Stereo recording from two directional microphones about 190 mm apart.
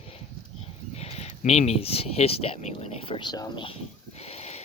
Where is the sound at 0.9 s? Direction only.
35° left (ahead or behind).